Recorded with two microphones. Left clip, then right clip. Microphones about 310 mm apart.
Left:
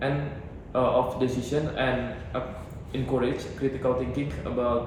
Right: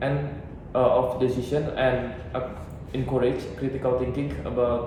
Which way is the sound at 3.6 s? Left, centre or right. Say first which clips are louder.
Left 3 dB; centre.